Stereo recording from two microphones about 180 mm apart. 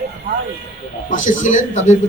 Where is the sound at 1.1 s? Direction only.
45° left (ahead or behind).